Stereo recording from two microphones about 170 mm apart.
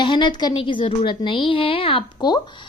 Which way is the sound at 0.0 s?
25° left (ahead or behind).